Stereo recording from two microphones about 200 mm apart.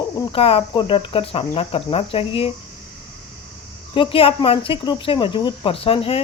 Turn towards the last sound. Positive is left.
turn(degrees=30)  # may be behind; listen again after turning